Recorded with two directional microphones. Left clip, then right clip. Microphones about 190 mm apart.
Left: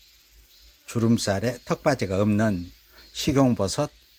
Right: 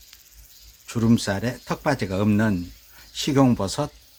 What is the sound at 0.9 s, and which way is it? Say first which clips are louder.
Speech: right 1 dB; 20° left (ahead or behind).